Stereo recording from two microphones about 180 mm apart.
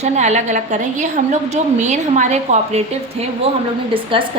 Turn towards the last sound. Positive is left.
turn(degrees=-30)  # may be behind; listen again after turning